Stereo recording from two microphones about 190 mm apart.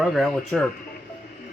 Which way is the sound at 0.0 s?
Centre (ahead or behind).